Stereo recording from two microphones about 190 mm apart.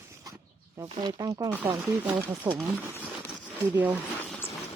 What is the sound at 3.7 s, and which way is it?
Speech, 10° right (ahead or behind).